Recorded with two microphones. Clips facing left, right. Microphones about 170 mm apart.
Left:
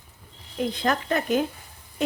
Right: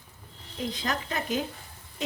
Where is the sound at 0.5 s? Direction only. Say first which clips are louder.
Left 6 dB; 55° left (ahead or behind).